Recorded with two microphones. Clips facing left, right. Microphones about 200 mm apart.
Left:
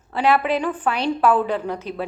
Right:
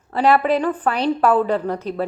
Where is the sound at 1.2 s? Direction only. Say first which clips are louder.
Right 1 dB; 35° right (ahead or behind).